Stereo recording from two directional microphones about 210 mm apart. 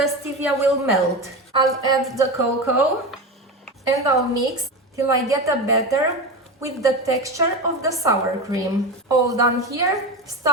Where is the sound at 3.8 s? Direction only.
15° right (ahead or behind).